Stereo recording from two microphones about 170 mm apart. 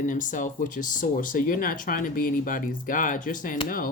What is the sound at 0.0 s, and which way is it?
Speech, 50° left (ahead or behind).